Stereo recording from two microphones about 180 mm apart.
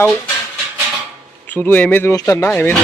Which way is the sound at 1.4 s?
10° left (ahead or behind).